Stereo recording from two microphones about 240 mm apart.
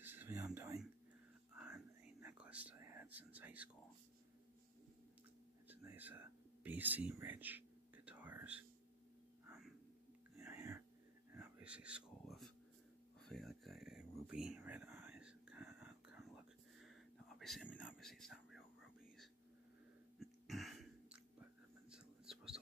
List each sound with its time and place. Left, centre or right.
0.0 s whispering: centre
5.7 s a sound: centre
11.3 s whispering: centre
13.2 s a sound: centre
16.8 s whispering: centre
20.2 s whispering: centre